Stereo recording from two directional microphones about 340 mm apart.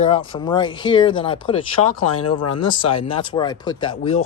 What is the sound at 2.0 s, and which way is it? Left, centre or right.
Speech, left.